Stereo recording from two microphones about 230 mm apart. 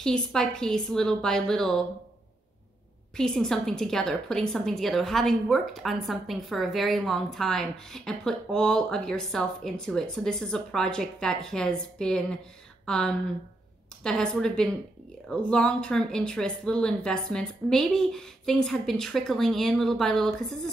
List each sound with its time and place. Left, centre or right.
0.0 s a woman's voice: centre
3.2 s a woman's voice: centre